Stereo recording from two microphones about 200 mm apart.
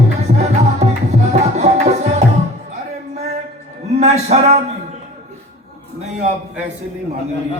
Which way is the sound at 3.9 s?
35° right (ahead or behind).